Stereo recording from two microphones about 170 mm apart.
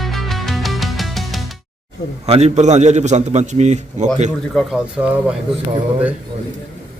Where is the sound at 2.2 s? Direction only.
35° right (ahead or behind).